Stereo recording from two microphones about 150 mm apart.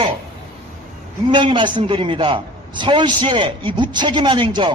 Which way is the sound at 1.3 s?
30° right (ahead or behind).